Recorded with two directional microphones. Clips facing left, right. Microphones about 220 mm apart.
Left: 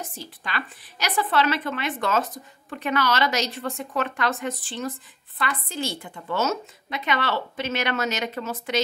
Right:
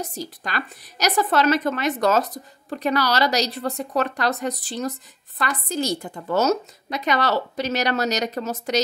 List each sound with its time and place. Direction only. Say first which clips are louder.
0.0 s a woman's voice: right 6 dB; 40° right (ahead or behind)